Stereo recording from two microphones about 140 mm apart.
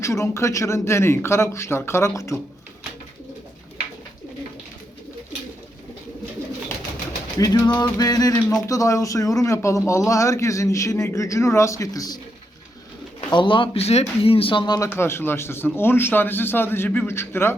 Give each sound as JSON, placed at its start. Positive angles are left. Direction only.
{"t": 0.0, "sound": "speech", "side_deg": 20}
{"t": 7.3, "sound": "speech", "side_deg": 25}
{"t": 13.3, "sound": "speech", "side_deg": 35}
{"t": 14.8, "sound": "speech", "side_deg": 15}